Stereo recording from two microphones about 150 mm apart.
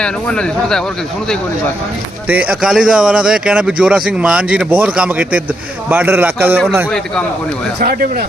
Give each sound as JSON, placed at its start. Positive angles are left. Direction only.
{"t": 0.0, "sound": "speech", "side_deg": 5}
{"t": 2.2, "sound": "speech", "side_deg": -10}
{"t": 7.8, "sound": "speech", "side_deg": -90}